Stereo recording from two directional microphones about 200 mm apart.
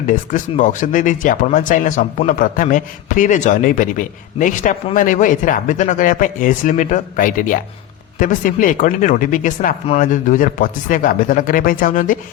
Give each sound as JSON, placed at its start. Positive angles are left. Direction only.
{"t": 0.1, "sound": "speech", "side_deg": 40}